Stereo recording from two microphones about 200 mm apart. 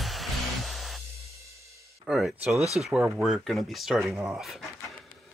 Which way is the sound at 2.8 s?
5° right (ahead or behind).